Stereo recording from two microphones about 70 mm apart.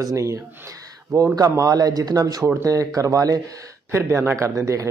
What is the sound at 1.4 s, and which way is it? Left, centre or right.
Speech, right.